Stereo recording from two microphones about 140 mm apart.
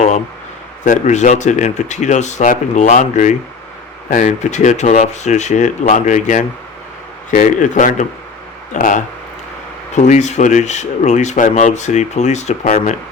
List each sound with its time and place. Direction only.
0.9 s speech: 60° left (ahead or behind)
9.9 s speech: 55° left (ahead or behind)